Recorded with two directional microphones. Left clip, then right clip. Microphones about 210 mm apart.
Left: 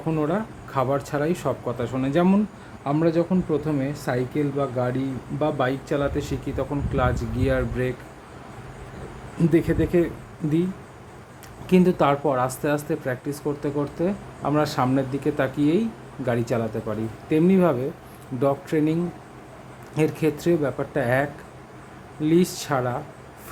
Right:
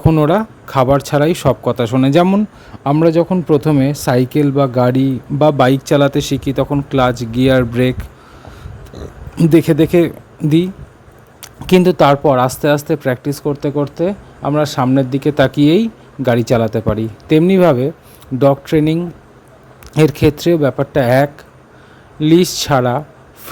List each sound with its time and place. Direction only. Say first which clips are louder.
0.0 s speech: right 12 dB; 50° right (ahead or behind)
9.4 s speech: right 10 dB; 50° right (ahead or behind)
11.6 s speech: right 10 dB; 45° right (ahead or behind)